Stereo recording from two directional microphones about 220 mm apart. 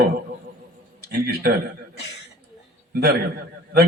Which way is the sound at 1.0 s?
45° right (ahead or behind).